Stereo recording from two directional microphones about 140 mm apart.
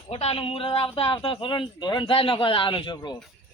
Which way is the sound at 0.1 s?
45° left (ahead or behind).